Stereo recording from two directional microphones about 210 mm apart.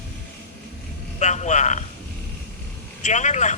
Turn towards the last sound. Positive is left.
turn(degrees=35)  # may be behind; listen again after turning